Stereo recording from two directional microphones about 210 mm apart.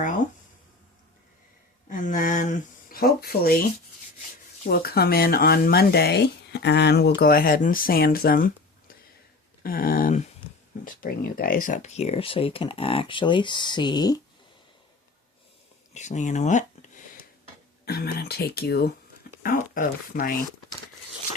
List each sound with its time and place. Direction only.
1.9 s a sound: 40° left (ahead or behind)
4.6 s speech: 45° left (ahead or behind)
9.6 s speech: 45° left (ahead or behind); by 14.2 s 20° left (ahead or behind)
16.0 s speech: 35° left (ahead or behind)
17.8 s speech: 50° left (ahead or behind)